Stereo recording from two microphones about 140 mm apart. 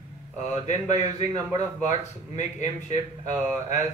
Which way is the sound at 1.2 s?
30° right (ahead or behind).